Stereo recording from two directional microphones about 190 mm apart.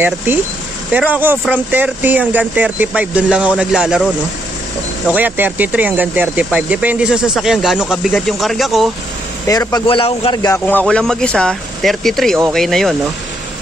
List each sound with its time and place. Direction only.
0.0 s speech: 10° right (ahead or behind)
5.1 s speech: 10° right (ahead or behind)
9.5 s speech: 20° left (ahead or behind)
10.7 s speech: 5° left (ahead or behind)